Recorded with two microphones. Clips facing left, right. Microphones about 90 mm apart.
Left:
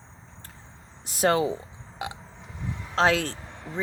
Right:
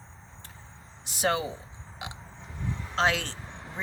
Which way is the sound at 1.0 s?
45° left (ahead or behind).